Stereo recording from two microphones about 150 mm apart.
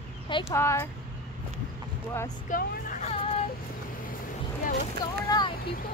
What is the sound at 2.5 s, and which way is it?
Speech, 60° left (ahead or behind).